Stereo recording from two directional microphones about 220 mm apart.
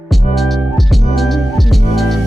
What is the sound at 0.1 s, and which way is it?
Music, centre (ahead or behind).